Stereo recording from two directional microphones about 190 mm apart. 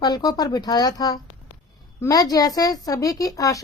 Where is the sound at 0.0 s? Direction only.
20° left (ahead or behind).